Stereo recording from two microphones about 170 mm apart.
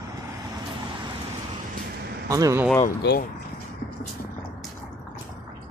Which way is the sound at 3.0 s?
70° left (ahead or behind).